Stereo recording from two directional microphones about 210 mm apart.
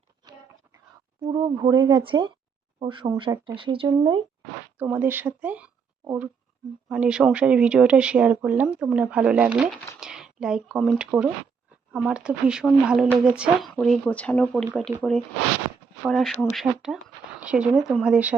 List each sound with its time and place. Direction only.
0.2 s a sound: 20° right (ahead or behind)
1.2 s speech: 20° right (ahead or behind)
4.8 s speech: 10° right (ahead or behind)